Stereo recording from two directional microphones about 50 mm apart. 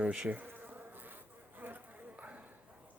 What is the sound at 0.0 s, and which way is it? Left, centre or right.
Speech, right.